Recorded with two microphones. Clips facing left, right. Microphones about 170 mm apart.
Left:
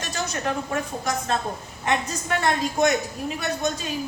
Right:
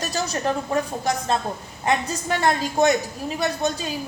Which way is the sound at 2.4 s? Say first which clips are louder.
Right 2 dB; 35° right (ahead or behind).